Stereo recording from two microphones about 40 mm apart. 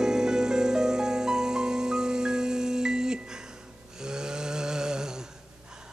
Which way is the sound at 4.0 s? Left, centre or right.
Centre.